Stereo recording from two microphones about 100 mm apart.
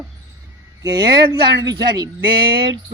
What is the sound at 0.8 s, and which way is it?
Speech, 35° right (ahead or behind).